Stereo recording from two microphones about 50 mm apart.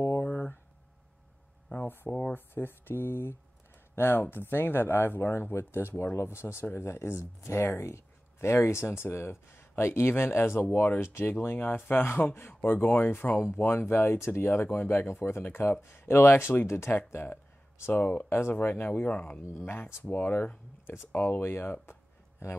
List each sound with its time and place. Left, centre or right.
0.2 s a sound: left
1.8 s a sound: left
2.3 s speech: left
7.7 s speech: left
17.9 s speech: left
18.3 s speech: left
19.6 s speech: left
20.8 s speech: left
22.4 s speech: left